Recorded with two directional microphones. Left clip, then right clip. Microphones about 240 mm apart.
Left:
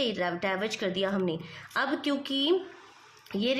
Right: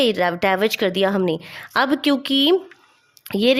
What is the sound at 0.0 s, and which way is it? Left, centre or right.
Speech, right.